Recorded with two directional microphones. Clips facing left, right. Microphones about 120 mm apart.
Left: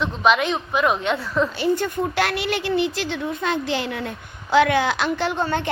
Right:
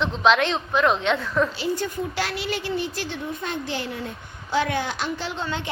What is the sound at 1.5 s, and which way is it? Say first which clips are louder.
A woman's voice: left 5 dB; 55° left (ahead or behind).